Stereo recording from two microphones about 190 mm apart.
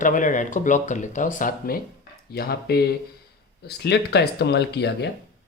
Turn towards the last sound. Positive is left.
turn(degrees=60)  # may be behind; listen again after turning